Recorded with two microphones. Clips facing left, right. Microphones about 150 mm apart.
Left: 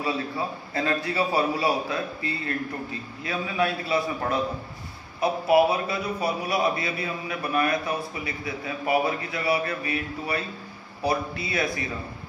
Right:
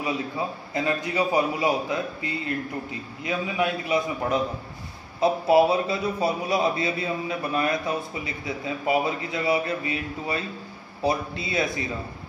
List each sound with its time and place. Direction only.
0.7 s a man's voice: 20° right (ahead or behind)